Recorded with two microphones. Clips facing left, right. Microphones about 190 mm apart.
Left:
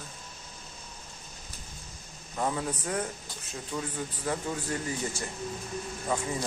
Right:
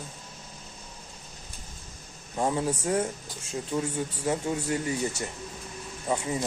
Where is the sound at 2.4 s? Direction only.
25° right (ahead or behind).